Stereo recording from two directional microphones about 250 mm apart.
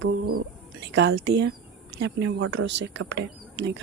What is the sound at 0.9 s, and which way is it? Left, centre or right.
A woman's voice, right.